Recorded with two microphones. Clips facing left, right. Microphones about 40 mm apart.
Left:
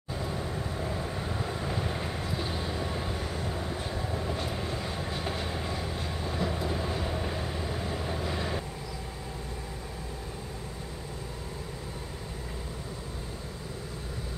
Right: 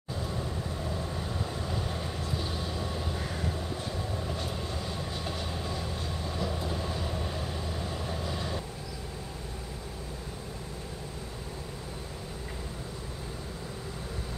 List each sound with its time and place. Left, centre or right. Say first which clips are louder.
0.1 s vehicle: left 1 dB; centre
3.2 s vehicle: even; centre
3.5 s train: left 1 dB; centre